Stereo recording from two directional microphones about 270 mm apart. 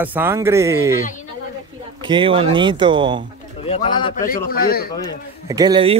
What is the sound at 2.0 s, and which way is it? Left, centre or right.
Speech, centre.